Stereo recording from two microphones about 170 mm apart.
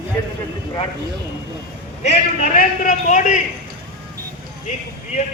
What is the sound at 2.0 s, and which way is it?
A man's voice, 50° left (ahead or behind).